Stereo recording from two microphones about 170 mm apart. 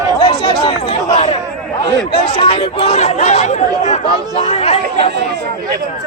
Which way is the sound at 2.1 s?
30° left (ahead or behind).